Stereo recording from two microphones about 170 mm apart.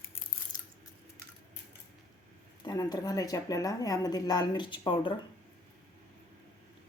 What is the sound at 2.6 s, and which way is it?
Speech, 25° left (ahead or behind).